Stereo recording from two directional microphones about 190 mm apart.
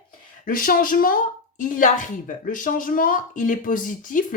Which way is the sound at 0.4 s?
45° left (ahead or behind).